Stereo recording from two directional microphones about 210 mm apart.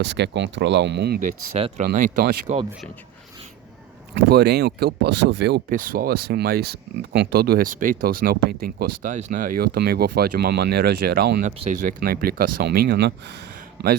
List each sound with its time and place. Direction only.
0.0 s speech: 55° right (ahead or behind)
4.1 s a man's voice: 50° right (ahead or behind)